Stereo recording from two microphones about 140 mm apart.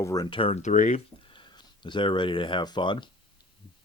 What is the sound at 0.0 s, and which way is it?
Speech, 25° left (ahead or behind).